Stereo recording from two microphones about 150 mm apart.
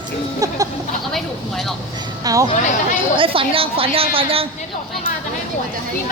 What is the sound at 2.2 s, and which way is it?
Speech, 20° right (ahead or behind).